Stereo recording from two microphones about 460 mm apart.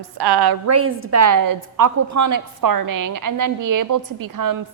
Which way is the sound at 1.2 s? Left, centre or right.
Right.